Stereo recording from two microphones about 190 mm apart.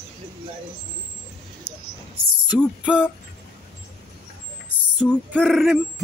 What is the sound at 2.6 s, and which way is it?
Music, 5° right (ahead or behind).